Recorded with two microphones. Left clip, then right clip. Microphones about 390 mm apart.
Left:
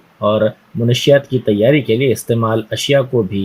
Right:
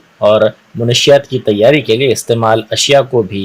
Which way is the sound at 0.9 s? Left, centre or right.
Right.